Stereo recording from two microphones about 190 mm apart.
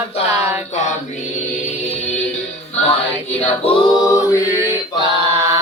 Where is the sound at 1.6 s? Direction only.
35° left (ahead or behind).